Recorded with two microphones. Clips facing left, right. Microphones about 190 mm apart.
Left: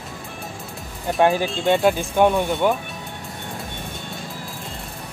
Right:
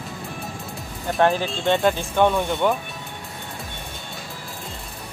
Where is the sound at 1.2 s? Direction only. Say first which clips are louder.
Left 2 dB; 10° left (ahead or behind).